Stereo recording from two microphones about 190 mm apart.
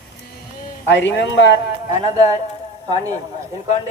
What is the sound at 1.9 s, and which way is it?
Speech, 40° left (ahead or behind).